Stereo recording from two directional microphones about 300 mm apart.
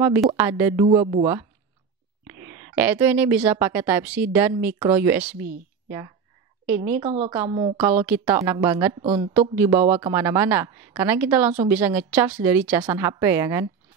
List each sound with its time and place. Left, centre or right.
0.0 s speech: centre
2.2 s speech: centre
6.7 s a woman's voice: right
7.0 s a woman's voice: centre
8.0 s speech: centre